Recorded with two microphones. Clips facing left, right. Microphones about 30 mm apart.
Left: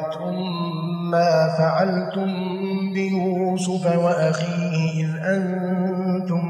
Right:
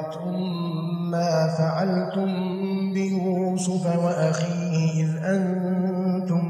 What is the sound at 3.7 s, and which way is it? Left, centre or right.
Mantra, left.